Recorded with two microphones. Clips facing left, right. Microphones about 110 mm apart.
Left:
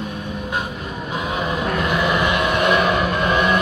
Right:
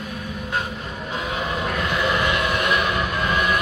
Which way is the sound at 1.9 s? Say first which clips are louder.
Left 2 dB; 15° left (ahead or behind).